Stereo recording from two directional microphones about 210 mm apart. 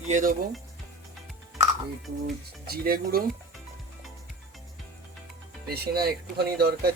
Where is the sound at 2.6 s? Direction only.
45° right (ahead or behind).